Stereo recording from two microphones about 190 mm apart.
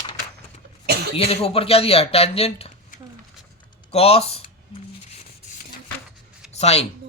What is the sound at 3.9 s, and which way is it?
Speech, 35° left (ahead or behind).